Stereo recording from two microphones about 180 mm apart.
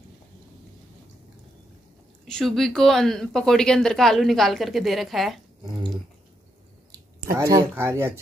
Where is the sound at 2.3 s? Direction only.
Centre (ahead or behind).